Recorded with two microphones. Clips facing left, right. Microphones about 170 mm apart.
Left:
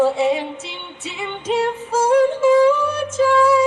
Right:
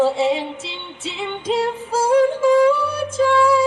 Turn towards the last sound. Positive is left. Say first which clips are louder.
# left 1 dB
turn(degrees=5)  # may be behind; listen again after turning